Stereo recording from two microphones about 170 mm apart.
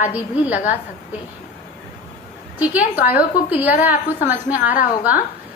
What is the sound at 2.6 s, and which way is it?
A woman's voice, 10° right (ahead or behind).